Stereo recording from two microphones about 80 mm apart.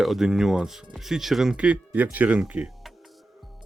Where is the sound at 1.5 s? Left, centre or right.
Centre.